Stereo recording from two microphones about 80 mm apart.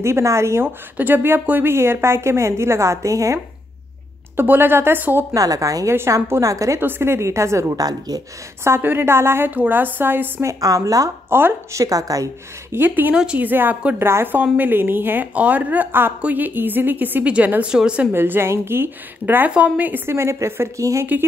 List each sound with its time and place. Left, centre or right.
0.0 s a woman's voice: right
0.9 s a woman's voice: right
4.4 s a woman's voice: right
5.3 s a woman's voice: right
6.8 s a woman's voice: right
8.6 s a woman's voice: right
10.4 s speech: right
11.2 s a woman's voice: right
11.8 s speech: right
12.7 s a woman's voice: right
13.1 s speech: centre
13.4 s a woman's voice: right
18.1 s a woman's voice: right